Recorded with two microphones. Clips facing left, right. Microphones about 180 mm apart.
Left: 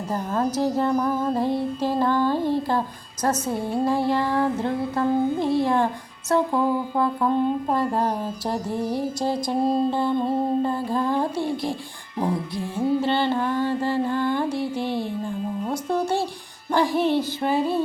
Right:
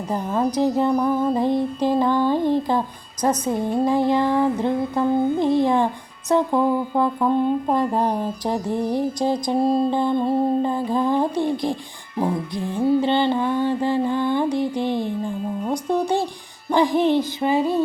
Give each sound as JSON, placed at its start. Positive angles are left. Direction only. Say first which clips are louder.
{"t": 0.1, "sound": "music", "louder": "right 2 dB", "side_deg": -15}
{"t": 13.0, "sound": "music", "louder": "right 3 dB", "side_deg": -15}